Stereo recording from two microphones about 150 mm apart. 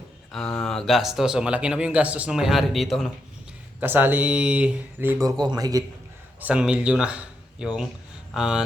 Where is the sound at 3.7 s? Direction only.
15° right (ahead or behind).